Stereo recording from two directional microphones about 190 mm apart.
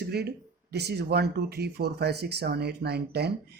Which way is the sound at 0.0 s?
55° right (ahead or behind).